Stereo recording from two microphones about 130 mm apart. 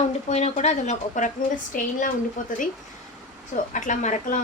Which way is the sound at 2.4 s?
80° left.